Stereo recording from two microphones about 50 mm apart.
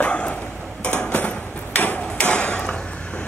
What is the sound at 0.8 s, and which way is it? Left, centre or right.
Dishes, left.